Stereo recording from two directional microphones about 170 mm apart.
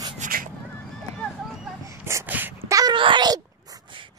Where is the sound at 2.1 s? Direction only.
15° right (ahead or behind).